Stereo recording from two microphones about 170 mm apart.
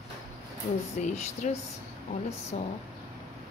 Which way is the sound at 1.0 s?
45° left (ahead or behind).